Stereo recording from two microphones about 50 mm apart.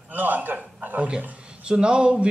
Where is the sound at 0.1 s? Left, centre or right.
Right.